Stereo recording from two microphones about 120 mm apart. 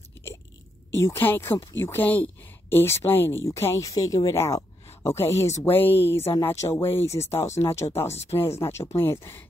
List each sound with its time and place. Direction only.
0.9 s speech: 20° left (ahead or behind)